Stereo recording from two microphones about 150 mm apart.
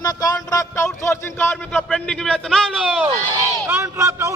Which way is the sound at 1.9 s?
5° left (ahead or behind).